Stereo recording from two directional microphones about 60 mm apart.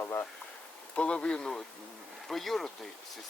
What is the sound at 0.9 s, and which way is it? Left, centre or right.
Speech, centre.